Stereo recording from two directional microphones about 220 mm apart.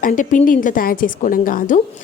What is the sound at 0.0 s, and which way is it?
A woman's voice, 35° left (ahead or behind).